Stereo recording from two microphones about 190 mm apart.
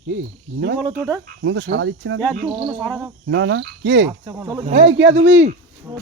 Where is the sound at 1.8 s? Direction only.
85° right.